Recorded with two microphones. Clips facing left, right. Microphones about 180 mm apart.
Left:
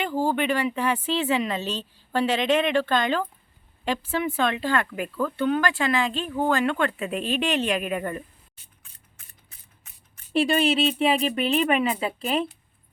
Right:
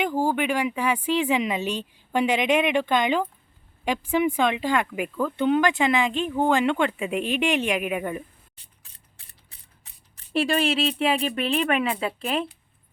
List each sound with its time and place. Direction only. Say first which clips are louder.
0.0 s speech: right 1 dB; 15° right (ahead or behind)
8.6 s mechanisms: even; 35° right (ahead or behind)
10.3 s speech: left 2 dB; centre (ahead or behind)